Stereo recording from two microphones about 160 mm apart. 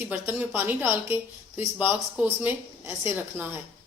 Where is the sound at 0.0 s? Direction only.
15° right (ahead or behind).